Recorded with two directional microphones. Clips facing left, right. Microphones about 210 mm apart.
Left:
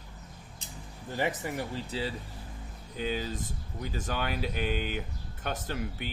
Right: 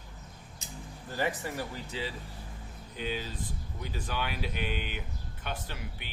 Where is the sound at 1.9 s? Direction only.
35° left (ahead or behind).